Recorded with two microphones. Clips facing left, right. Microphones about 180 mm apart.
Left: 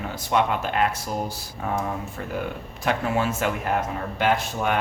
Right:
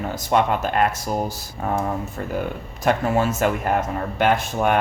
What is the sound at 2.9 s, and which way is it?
Speech, 45° right (ahead or behind).